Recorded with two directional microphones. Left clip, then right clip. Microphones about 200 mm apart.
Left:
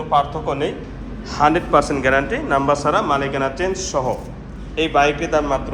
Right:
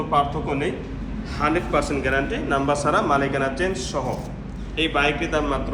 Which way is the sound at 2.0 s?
Centre (ahead or behind).